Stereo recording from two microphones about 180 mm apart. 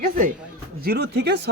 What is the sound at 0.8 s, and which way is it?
Speech, 65° right (ahead or behind).